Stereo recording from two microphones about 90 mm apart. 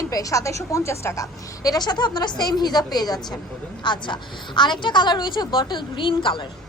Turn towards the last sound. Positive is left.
turn(degrees=65)  # may be behind; listen again after turning